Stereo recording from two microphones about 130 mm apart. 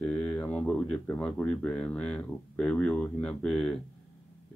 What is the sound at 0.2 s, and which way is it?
Speech, 5° left (ahead or behind).